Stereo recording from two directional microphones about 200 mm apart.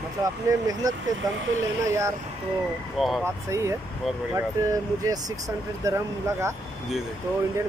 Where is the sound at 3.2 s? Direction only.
15° right (ahead or behind).